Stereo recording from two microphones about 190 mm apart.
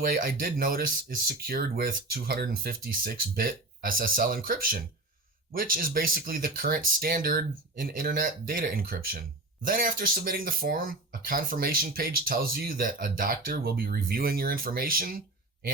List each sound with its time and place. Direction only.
0.0 s speech: 50° right (ahead or behind)